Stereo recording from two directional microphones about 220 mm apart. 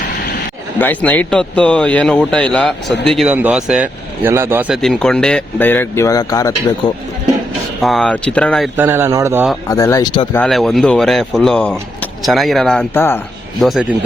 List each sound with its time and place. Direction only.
0.8 s speech: 10° left (ahead or behind); by 4.8 s 10° right (ahead or behind)
4.8 s speech: centre (ahead or behind)
7.8 s speech: centre (ahead or behind)
8.7 s a man's voice: 10° right (ahead or behind)
9.6 s speech: 15° left (ahead or behind)
10.4 s speech: centre (ahead or behind)